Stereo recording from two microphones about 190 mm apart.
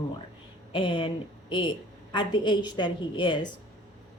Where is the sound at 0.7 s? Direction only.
25° left (ahead or behind).